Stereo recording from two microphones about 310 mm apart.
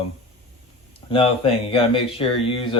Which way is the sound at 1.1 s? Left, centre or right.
Centre.